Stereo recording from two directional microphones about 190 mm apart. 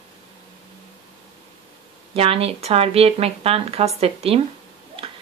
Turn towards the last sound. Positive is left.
turn(degrees=-30)  # may be behind; listen again after turning